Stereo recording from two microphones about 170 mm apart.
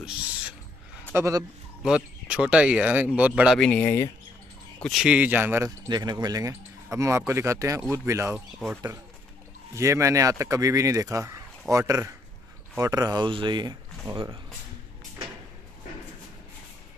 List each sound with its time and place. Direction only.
1.1 s speech: 15° right (ahead or behind)
1.8 s speech: 5° right (ahead or behind)
3.5 s speech: 5° left (ahead or behind)
4.7 s speech: centre (ahead or behind)
5.9 s speech: 25° right (ahead or behind)
9.8 s speech: 15° right (ahead or behind)